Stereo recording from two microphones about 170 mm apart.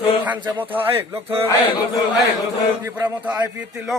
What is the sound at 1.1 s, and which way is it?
Speech, 15° right (ahead or behind).